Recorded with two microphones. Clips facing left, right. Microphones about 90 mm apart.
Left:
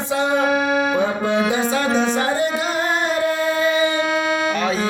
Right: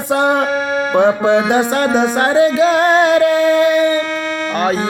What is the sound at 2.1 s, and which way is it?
Music, 70° right (ahead or behind).